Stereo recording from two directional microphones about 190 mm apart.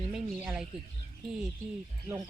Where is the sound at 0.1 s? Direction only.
5° right (ahead or behind).